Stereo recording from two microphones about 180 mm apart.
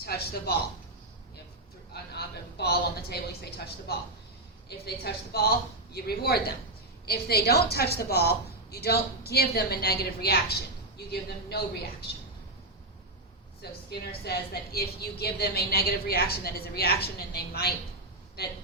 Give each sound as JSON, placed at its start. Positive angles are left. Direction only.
{"t": 0.0, "sound": "a woman's voice", "side_deg": 60}
{"t": 1.9, "sound": "a sound", "side_deg": 65}
{"t": 5.0, "sound": "a woman's voice", "side_deg": 60}
{"t": 13.6, "sound": "a woman's voice", "side_deg": 65}